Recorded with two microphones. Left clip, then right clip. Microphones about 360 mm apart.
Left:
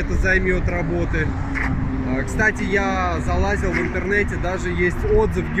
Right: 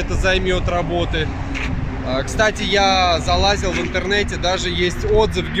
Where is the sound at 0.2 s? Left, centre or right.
Right.